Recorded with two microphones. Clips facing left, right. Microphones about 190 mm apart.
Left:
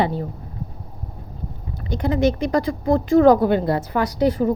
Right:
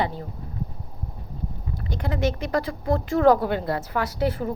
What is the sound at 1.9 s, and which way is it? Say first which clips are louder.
A woman's voice: left 7 dB; 20° left (ahead or behind).